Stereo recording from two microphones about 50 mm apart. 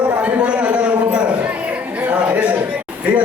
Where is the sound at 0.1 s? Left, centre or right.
Right.